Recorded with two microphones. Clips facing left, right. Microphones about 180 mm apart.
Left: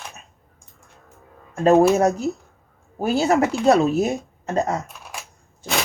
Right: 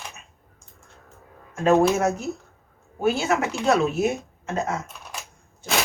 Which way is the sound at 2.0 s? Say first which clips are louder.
Left 4 dB; 35° left (ahead or behind).